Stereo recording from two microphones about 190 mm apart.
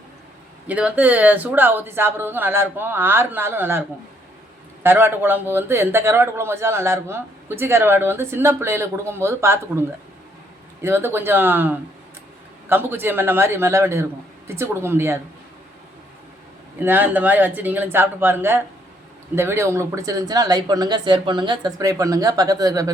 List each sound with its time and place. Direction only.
0.7 s speech: 5° right (ahead or behind)
10.8 s speech: 10° right (ahead or behind)
16.8 s speech: 10° right (ahead or behind)